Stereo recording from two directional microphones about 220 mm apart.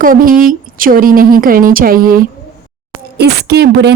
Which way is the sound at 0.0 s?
40° right (ahead or behind).